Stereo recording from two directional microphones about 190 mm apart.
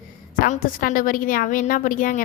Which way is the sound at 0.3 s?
45° left (ahead or behind).